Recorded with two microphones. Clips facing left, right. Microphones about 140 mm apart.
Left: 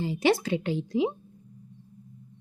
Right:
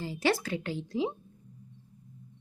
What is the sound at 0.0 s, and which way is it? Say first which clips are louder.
A woman's voice: left 5 dB; 20° left (ahead or behind).